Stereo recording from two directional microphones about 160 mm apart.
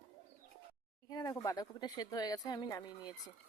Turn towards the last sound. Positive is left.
turn(degrees=25)  # may be behind; listen again after turning